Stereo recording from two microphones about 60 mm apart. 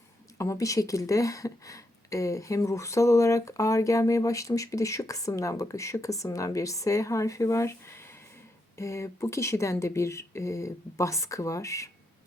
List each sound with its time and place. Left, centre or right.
0.3 s speech: left